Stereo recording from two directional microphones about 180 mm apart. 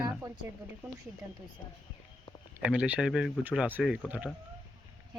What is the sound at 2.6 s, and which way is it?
Speech, 5° right (ahead or behind).